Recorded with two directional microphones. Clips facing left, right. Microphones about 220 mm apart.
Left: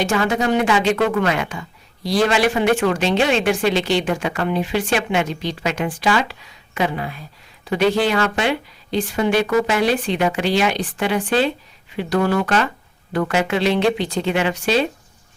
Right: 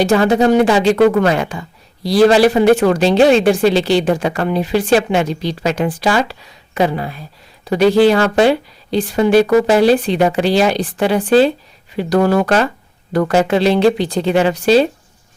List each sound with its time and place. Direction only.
0.0 s speech: 35° right (ahead or behind)